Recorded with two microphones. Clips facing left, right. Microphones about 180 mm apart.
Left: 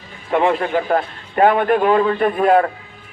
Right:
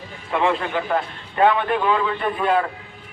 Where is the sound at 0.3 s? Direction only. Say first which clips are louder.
Left 4 dB; 30° left (ahead or behind).